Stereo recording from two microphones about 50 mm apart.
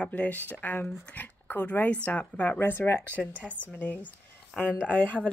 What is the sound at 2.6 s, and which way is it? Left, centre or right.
Speech, left.